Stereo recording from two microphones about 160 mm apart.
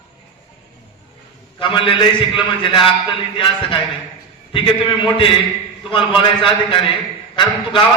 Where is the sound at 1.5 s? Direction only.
30° left (ahead or behind).